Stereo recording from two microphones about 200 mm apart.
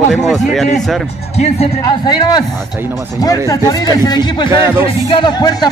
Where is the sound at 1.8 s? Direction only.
20° left (ahead or behind).